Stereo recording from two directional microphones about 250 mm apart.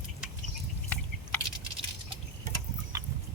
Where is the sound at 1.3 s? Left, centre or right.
Centre.